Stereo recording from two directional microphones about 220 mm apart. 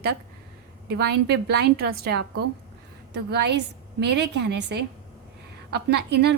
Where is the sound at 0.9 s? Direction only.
50° right (ahead or behind).